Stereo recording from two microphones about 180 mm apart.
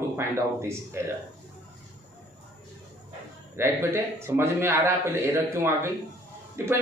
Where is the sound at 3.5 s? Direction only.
15° right (ahead or behind).